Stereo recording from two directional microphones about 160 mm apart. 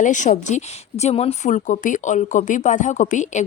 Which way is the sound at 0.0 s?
50° left (ahead or behind).